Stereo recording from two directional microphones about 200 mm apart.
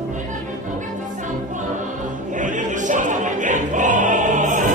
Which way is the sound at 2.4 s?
40° right (ahead or behind).